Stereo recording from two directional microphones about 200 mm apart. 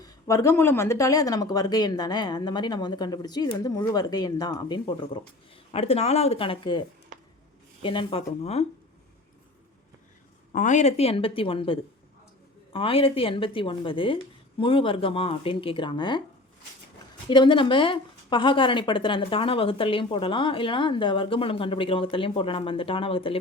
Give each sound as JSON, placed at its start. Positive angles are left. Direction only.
{"t": 0.0, "sound": "speech", "side_deg": 15}
{"t": 10.5, "sound": "speech", "side_deg": 40}
{"t": 17.2, "sound": "speech", "side_deg": 25}